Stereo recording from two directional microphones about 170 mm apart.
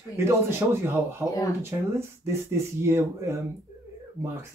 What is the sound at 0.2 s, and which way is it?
Speech, 15° right (ahead or behind).